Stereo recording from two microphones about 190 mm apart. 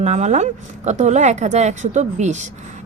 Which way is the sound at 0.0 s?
35° right (ahead or behind).